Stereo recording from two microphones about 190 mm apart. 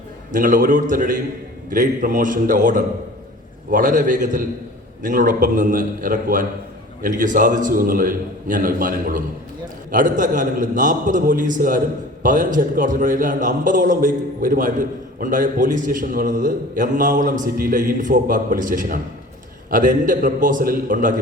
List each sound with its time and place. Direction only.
0.3 s a man's voice: 45° right (ahead or behind)